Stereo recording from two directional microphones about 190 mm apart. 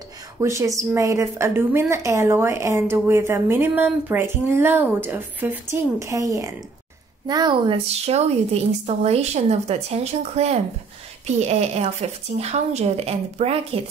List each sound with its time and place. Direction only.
0.4 s a woman's voice: 15° right (ahead or behind); by 13.7 s 30° right (ahead or behind)